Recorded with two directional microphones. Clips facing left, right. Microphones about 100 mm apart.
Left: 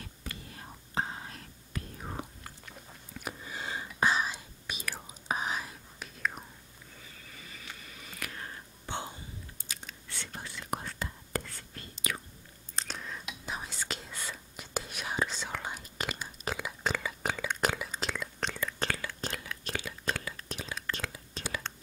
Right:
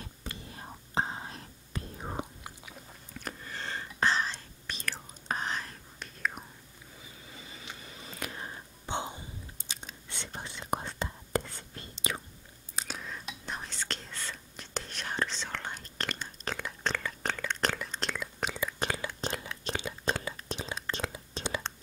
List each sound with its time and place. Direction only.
0.0 s whispering: 25° right (ahead or behind)
3.2 s whispering: 10° left (ahead or behind)
7.0 s a sound: 20° right (ahead or behind)
9.7 s whispering: 20° right (ahead or behind)
12.7 s whispering: 5° right (ahead or behind)
18.5 s whispering: 15° right (ahead or behind)